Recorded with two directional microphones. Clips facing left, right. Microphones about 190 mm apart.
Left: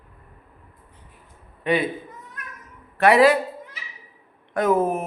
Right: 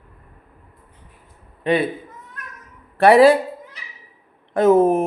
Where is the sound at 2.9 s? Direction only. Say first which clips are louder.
Right 4 dB; 30° right (ahead or behind).